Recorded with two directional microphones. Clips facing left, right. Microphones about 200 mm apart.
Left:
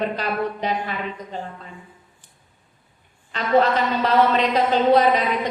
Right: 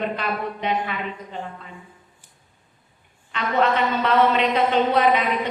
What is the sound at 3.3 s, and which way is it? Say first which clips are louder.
A woman's voice: left 3 dB; 35° left (ahead or behind).